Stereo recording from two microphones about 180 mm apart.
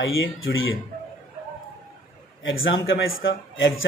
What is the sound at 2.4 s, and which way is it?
A man's voice, 90° left.